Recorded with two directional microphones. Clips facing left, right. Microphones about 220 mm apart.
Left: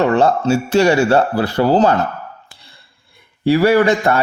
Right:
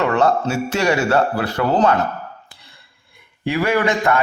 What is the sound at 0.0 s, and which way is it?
A man's voice, 30° left (ahead or behind).